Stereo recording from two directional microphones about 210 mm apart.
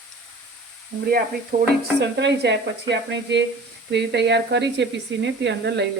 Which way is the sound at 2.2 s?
55° right (ahead or behind).